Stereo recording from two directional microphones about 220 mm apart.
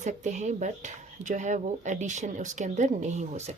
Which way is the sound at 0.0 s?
35° right (ahead or behind).